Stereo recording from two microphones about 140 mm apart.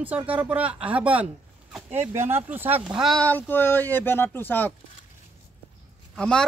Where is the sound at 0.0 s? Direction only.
10° right (ahead or behind).